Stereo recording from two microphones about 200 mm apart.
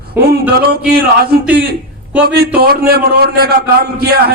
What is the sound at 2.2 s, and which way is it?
Speech, 50° right (ahead or behind).